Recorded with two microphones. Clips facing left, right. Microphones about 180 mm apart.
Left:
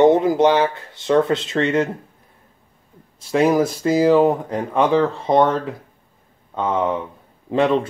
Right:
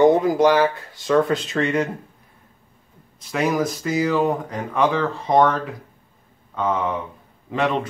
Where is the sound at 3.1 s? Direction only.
30° left (ahead or behind).